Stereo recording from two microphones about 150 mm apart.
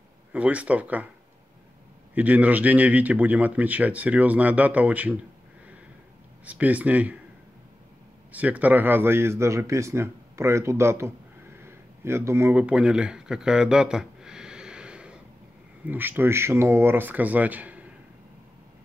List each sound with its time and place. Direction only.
0.3 s speech: 10° right (ahead or behind)
2.1 s speech: 10° right (ahead or behind)
6.4 s speech: 10° right (ahead or behind)
8.3 s speech: 10° right (ahead or behind)
11.6 s a sound: 15° right (ahead or behind)
15.8 s speech: 15° right (ahead or behind)